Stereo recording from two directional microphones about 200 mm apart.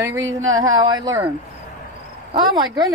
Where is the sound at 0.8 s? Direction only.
20° right (ahead or behind).